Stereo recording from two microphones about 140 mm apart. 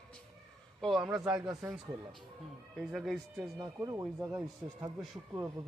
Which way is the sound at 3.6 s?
25° right (ahead or behind).